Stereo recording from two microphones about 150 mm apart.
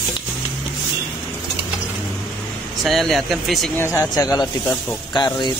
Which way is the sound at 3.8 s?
20° left (ahead or behind).